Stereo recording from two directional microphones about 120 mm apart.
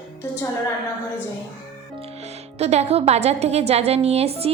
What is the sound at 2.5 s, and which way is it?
A woman's voice, 65° right (ahead or behind).